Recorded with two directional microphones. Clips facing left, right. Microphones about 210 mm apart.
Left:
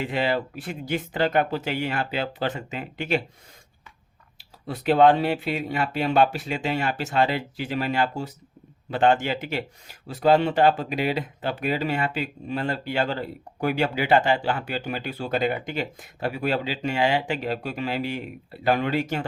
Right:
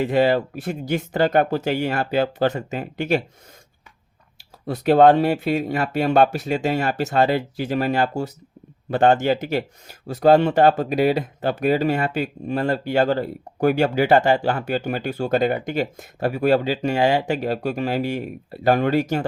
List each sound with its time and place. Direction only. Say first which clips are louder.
0.0 s speech: right 7 dB; 45° right (ahead or behind)
4.4 s speech: right 5 dB; 45° right (ahead or behind)